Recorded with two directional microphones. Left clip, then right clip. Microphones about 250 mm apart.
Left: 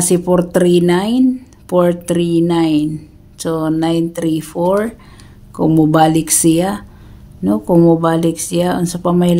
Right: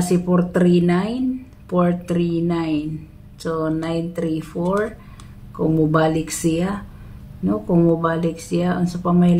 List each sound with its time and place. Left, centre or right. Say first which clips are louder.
0.1 s speech: left 7 dB; left